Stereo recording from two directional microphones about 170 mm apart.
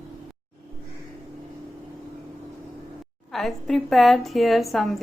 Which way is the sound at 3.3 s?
Centre (ahead or behind).